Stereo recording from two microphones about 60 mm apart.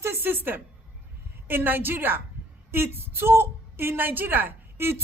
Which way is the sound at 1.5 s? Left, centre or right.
Right.